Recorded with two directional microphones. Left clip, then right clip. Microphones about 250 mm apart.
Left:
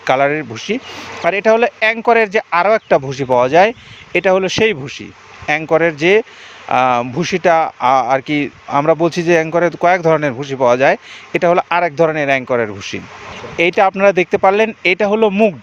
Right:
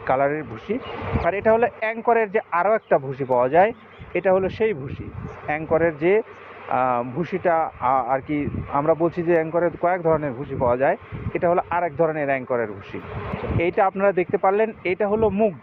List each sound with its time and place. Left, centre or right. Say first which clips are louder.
0.0 s speech: left 7 dB; left